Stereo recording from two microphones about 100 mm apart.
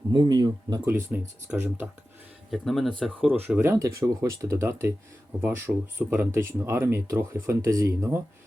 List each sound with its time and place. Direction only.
0.1 s speech: 45° right (ahead or behind)
1.1 s speech: 10° right (ahead or behind)
2.5 s speech: centre (ahead or behind)
3.2 s speech: 15° right (ahead or behind); by 8.2 s 30° right (ahead or behind)